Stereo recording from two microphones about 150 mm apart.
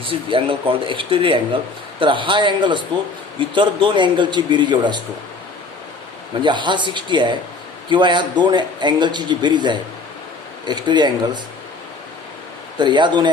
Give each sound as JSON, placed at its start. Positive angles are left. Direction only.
{"t": 0.0, "sound": "a man's voice", "side_deg": -35}
{"t": 6.4, "sound": "a man's voice", "side_deg": -30}
{"t": 12.7, "sound": "a man's voice", "side_deg": -30}